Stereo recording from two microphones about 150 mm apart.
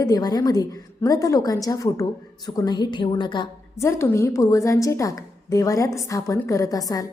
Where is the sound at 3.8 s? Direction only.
20° left (ahead or behind).